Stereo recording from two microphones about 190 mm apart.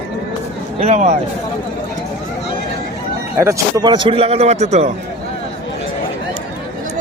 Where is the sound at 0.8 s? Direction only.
35° right (ahead or behind).